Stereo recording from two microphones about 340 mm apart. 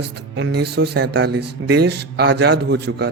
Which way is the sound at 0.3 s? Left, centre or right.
Right.